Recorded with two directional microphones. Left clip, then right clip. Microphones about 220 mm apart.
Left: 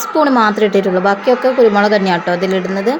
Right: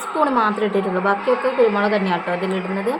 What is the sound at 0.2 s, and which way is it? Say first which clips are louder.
A woman's voice: left 7 dB; 25° left (ahead or behind).